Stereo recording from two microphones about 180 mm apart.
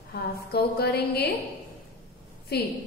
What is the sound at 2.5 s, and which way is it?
Speech, 60° left (ahead or behind).